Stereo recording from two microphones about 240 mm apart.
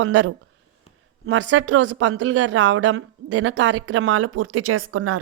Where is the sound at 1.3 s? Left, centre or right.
Right.